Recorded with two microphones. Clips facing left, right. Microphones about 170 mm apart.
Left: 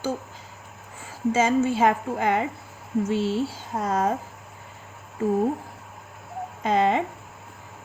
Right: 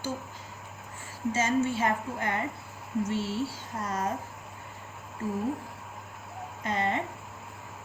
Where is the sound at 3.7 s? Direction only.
90° left.